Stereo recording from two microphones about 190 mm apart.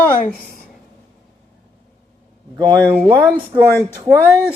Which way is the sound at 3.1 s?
20° right (ahead or behind).